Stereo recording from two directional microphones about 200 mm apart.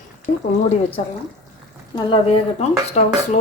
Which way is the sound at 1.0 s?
30° left (ahead or behind).